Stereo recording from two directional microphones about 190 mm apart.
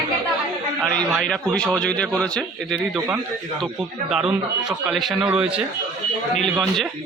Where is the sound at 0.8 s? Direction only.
5° left (ahead or behind).